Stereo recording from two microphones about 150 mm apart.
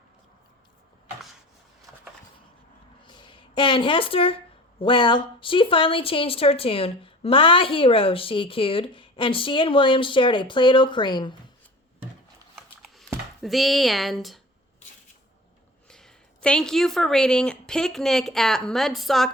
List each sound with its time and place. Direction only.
3.1 s a sound: 30° left (ahead or behind)
4.8 s speech: 35° left (ahead or behind)
13.4 s speech: centre (ahead or behind)
15.9 s speech: 5° left (ahead or behind)